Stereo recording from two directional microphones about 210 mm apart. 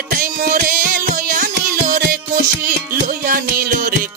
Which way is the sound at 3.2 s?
40° right (ahead or behind).